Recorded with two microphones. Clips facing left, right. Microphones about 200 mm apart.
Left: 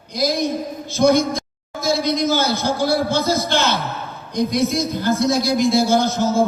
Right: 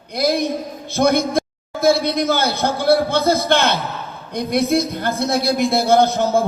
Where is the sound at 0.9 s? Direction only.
60° right (ahead or behind).